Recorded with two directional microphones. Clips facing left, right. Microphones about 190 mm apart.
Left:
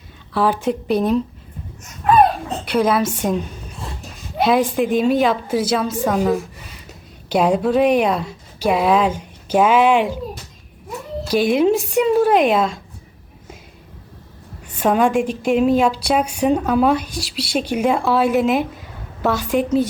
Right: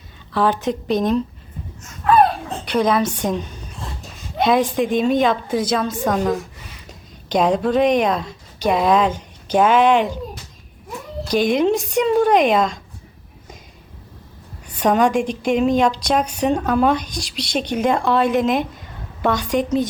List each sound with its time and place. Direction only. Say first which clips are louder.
0.3 s a woman's voice: left 1 dB; 5° left (ahead or behind)
2.0 s a sound: left 1 dB; 20° left (ahead or behind)
2.6 s a woman's voice: even; 5° left (ahead or behind)
11.3 s speech: left 1 dB; 5° left (ahead or behind)
14.8 s a woman's voice: even; 5° left (ahead or behind)